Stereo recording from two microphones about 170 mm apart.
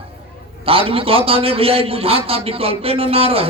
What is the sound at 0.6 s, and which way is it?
A man's voice, 35° right (ahead or behind).